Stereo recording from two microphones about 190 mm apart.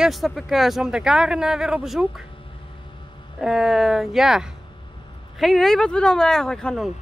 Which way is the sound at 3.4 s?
5° right (ahead or behind).